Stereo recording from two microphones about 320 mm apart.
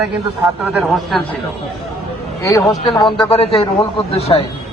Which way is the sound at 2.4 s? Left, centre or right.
Centre.